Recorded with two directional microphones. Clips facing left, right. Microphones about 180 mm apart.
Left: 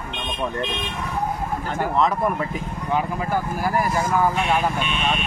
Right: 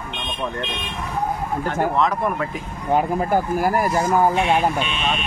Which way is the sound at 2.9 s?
45° right (ahead or behind).